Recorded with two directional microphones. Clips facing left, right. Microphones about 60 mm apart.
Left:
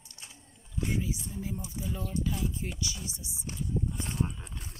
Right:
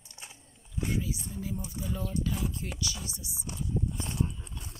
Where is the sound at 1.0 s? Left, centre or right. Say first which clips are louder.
Even; left.